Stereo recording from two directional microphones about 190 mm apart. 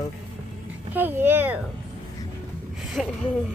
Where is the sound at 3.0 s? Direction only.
Centre (ahead or behind).